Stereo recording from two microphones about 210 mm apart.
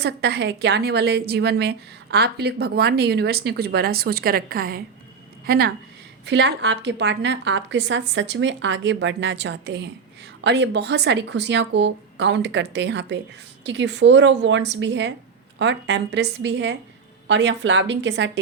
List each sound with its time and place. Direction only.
0.0 s a woman's voice: 50° right (ahead or behind)
6.2 s a woman's voice: 55° right (ahead or behind)